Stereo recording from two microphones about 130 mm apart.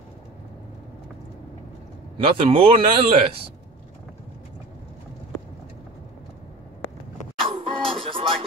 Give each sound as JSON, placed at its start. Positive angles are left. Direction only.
{"t": 2.2, "sound": "speech", "side_deg": -45}
{"t": 7.4, "sound": "music", "side_deg": -45}